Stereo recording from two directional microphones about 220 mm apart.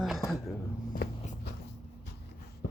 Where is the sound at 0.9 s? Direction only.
40° left (ahead or behind).